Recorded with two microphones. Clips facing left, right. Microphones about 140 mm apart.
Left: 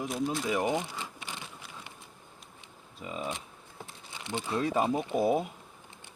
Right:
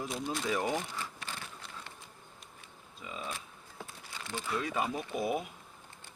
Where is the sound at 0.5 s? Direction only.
20° left (ahead or behind).